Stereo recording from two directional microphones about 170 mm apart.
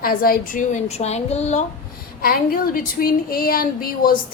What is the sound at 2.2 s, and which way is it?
A woman's voice, 60° left (ahead or behind).